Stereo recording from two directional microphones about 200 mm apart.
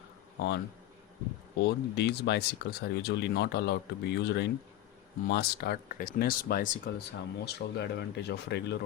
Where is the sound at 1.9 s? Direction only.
55° left (ahead or behind).